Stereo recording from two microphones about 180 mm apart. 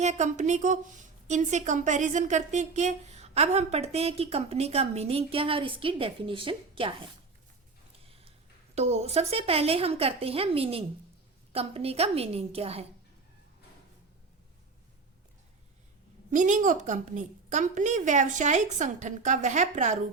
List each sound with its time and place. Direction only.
0.0 s a woman's voice: 40° right (ahead or behind)
8.0 s a sound: 30° right (ahead or behind)
8.7 s a woman's voice: 35° right (ahead or behind)
16.3 s a woman's voice: 45° right (ahead or behind)